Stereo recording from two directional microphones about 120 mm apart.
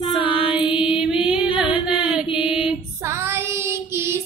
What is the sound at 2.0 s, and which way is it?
Chant, 10° right (ahead or behind).